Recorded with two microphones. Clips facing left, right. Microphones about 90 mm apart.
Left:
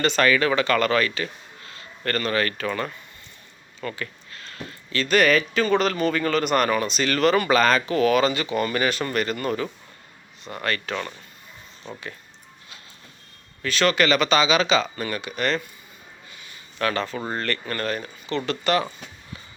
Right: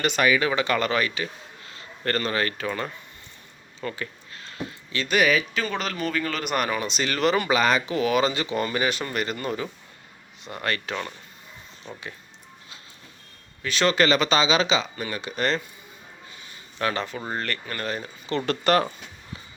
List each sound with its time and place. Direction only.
0.0 s a man's voice: 10° right (ahead or behind)
13.6 s speech: 20° right (ahead or behind)
15.2 s speech: 30° right (ahead or behind)
16.7 s speech: 20° right (ahead or behind)
17.2 s speech: 5° right (ahead or behind)
18.3 s speech: 40° right (ahead or behind)